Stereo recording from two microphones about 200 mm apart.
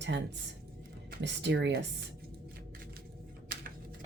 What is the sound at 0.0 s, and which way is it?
Speech, 60° right (ahead or behind).